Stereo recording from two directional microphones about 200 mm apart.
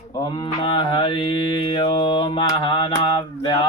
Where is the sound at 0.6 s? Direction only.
25° left (ahead or behind).